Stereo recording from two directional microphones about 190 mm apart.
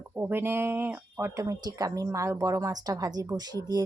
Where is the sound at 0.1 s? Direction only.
10° right (ahead or behind).